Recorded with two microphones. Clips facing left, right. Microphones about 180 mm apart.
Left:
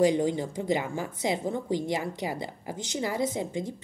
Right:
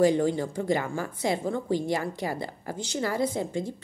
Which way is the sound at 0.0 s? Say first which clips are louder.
Right 1 dB; 15° left (ahead or behind).